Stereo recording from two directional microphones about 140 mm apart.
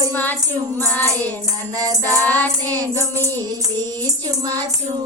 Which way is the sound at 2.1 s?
10° left (ahead or behind).